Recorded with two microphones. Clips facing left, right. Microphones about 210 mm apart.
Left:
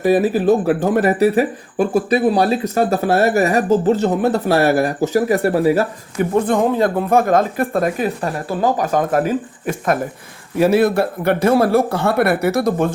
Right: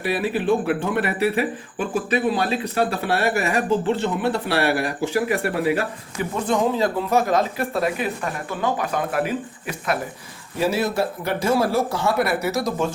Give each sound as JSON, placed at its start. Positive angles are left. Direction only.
{"t": 0.0, "sound": "speech", "side_deg": 45}
{"t": 6.4, "sound": "speech", "side_deg": 55}
{"t": 10.6, "sound": "speech", "side_deg": 55}